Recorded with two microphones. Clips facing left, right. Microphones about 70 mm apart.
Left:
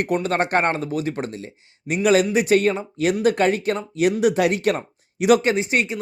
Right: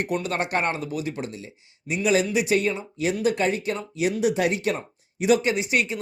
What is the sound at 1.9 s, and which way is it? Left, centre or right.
Speech, left.